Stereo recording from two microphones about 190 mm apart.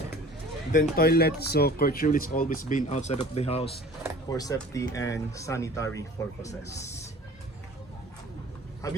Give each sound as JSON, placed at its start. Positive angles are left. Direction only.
{"t": 0.9, "sound": "speech", "side_deg": 55}
{"t": 4.3, "sound": "speech", "side_deg": 20}
{"t": 8.8, "sound": "speech", "side_deg": 15}